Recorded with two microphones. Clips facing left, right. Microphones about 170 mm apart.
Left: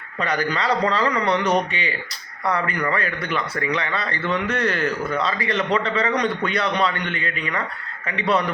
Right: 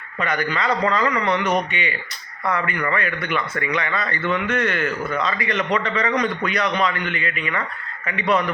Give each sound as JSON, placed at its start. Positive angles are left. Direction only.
{"t": 0.2, "sound": "a man's voice", "side_deg": 35}